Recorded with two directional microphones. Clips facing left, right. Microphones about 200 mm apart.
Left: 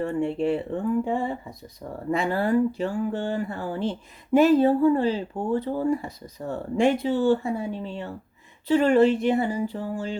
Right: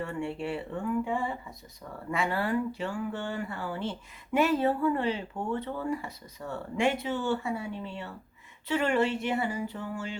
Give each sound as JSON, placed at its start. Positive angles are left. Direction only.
{"t": 0.2, "sound": "speech", "side_deg": 40}